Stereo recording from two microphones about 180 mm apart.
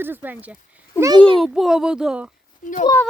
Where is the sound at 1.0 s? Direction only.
25° right (ahead or behind).